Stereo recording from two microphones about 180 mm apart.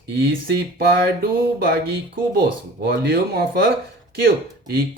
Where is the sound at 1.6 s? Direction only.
55° right (ahead or behind).